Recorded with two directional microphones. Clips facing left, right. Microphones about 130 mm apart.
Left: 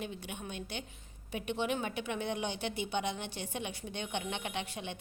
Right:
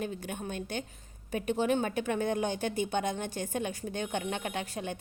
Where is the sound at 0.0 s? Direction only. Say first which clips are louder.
Right 5 dB; 45° right (ahead or behind).